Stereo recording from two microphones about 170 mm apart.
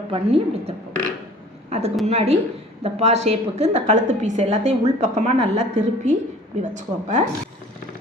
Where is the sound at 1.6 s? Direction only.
40° right (ahead or behind).